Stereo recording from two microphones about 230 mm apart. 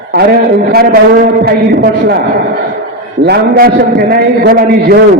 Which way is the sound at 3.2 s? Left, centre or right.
Right.